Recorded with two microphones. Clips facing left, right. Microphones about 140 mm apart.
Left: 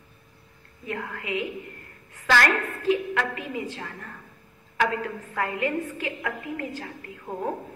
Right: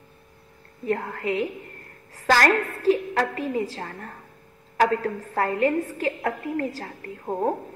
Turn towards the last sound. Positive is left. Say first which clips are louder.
# right 5 dB
turn(degrees=-40)  # may be behind; listen again after turning